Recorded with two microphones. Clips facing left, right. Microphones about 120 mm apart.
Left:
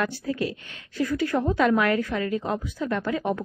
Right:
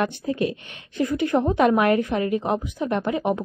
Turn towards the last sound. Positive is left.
turn(degrees=-20)  # may be behind; listen again after turning